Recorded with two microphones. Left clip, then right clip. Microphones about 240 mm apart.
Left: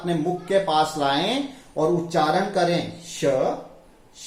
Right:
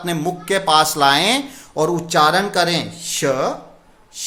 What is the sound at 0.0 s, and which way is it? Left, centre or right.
A man's voice, right.